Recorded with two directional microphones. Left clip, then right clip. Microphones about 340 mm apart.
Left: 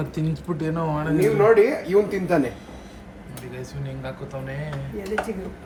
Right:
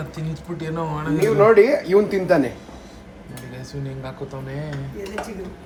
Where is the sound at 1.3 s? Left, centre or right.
Right.